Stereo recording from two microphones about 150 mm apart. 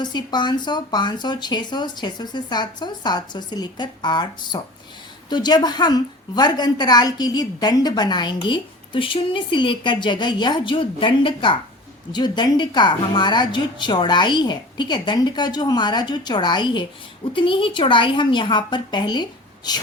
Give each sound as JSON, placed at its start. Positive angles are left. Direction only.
{"t": 0.0, "sound": "a woman's voice", "side_deg": 30}